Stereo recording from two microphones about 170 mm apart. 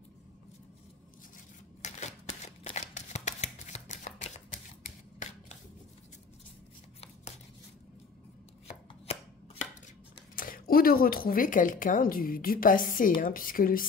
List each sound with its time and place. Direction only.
1.8 s shuffling cards: 40° left (ahead or behind)
9.0 s chopping: 40° left (ahead or behind)
10.3 s speech: 55° left (ahead or behind)